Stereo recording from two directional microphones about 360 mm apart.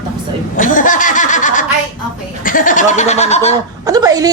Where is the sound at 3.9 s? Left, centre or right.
Centre.